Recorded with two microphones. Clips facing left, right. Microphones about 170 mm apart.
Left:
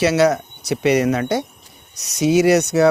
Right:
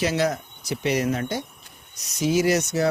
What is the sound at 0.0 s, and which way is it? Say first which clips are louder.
Speech: left 8 dB; 80° left.